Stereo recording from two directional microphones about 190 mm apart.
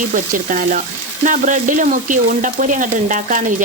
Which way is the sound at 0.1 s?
45° right (ahead or behind).